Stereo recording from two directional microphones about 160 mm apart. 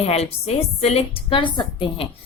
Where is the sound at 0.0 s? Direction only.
40° left (ahead or behind).